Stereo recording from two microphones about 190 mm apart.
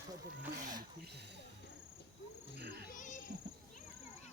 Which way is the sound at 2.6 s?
60° right (ahead or behind).